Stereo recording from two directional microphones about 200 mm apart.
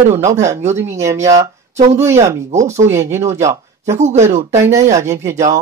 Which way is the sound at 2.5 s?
35° right (ahead or behind).